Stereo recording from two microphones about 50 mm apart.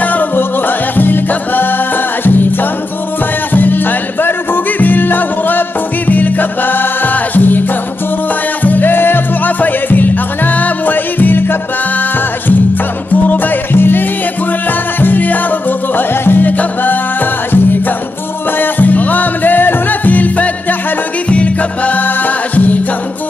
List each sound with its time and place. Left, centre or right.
0.0 s music: left
3.5 s music: left
8.6 s music: left
13.3 s music: left
18.6 s music: left